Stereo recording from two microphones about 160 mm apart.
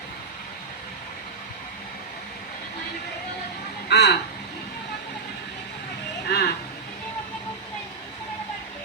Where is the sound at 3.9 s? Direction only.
90° left.